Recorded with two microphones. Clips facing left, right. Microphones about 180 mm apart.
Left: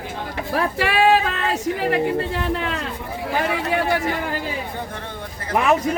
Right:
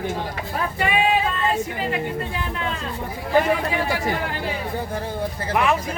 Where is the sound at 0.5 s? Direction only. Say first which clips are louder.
Left 3 dB; 90° left.